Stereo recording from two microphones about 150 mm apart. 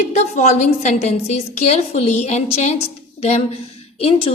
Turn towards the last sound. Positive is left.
turn(degrees=40)  # may be behind; listen again after turning